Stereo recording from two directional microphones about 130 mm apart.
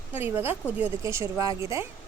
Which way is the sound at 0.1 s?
15° right (ahead or behind).